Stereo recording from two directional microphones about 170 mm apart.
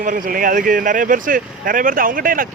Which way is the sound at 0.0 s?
55° right (ahead or behind).